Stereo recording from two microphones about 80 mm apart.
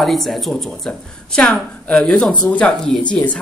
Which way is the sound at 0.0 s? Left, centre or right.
Centre.